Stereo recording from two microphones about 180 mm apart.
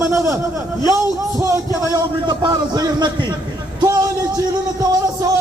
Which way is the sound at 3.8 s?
20° right (ahead or behind).